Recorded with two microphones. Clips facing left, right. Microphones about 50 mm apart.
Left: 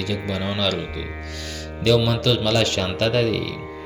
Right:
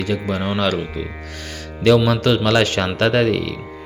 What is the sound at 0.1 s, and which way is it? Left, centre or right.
Speech, right.